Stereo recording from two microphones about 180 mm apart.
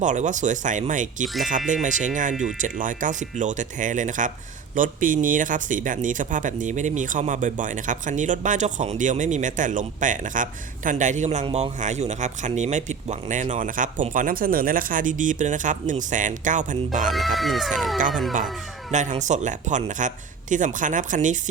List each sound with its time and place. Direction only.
0.0 s speech: 45° right (ahead or behind)
17.1 s speech: centre (ahead or behind)
18.9 s speech: 40° right (ahead or behind)